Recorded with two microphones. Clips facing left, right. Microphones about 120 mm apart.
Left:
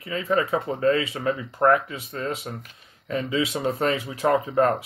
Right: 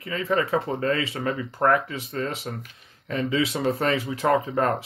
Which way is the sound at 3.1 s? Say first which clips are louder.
Even; 30° left (ahead or behind).